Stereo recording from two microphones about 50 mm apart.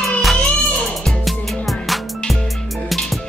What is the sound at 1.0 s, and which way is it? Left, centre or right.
Music, centre.